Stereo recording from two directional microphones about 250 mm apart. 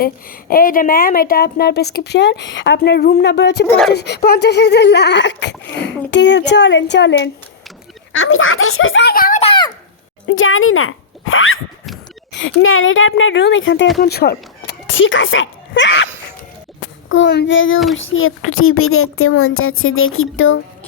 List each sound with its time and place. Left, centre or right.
0.0 s a woman's voice: left
3.7 s speech: centre
3.9 s speech: left
9.4 s a sound: centre
10.2 s speech: left
14.0 s a child's voice: left
17.1 s speech: left